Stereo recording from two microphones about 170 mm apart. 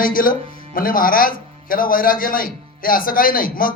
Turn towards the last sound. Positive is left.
turn(degrees=55)  # may be behind; listen again after turning